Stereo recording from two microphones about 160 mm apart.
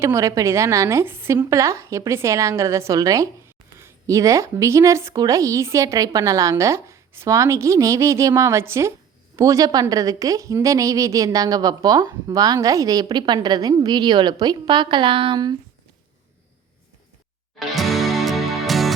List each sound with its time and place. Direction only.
0.0 s a woman's voice: 20° right (ahead or behind)
17.7 s music: centre (ahead or behind)